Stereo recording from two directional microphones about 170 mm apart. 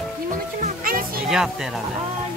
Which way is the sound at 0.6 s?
55° right (ahead or behind).